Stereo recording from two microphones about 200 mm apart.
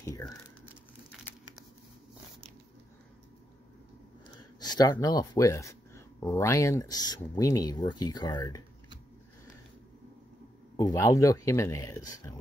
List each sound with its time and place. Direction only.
4.6 s a sound: 20° left (ahead or behind)
5.0 s speech: 20° left (ahead or behind)
10.8 s speech: 15° left (ahead or behind)